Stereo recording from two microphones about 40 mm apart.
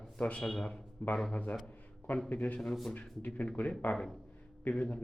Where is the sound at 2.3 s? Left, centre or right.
Left.